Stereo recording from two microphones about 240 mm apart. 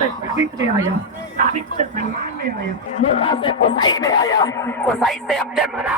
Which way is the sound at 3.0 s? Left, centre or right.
Left.